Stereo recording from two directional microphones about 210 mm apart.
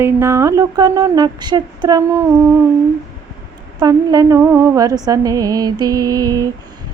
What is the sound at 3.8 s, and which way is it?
Speech, 20° right (ahead or behind).